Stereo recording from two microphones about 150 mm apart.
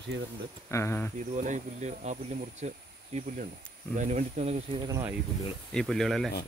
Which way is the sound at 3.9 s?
55° right (ahead or behind).